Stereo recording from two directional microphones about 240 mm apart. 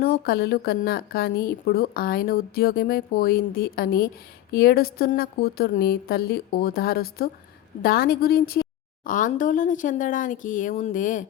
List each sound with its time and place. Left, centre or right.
0.0 s a woman's voice: left